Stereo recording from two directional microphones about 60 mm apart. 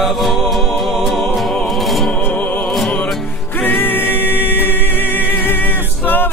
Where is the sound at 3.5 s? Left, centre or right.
Left.